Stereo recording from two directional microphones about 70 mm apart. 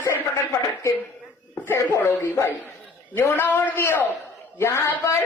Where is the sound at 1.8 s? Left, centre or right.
Left.